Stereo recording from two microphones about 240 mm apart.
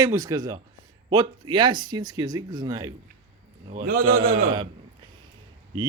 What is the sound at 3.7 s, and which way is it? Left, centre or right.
Speech, right.